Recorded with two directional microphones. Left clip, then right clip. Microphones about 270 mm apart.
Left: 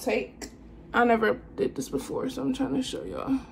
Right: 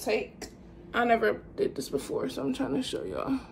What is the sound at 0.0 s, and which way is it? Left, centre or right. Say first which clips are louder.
A woman's voice: left 1 dB; centre.